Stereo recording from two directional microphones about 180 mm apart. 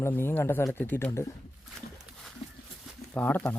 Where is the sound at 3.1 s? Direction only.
10° left (ahead or behind).